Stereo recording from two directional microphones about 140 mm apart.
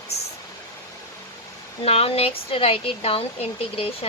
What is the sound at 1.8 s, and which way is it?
Speech, 45° left (ahead or behind).